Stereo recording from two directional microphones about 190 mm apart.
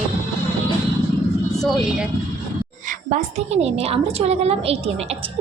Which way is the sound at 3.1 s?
35° right (ahead or behind).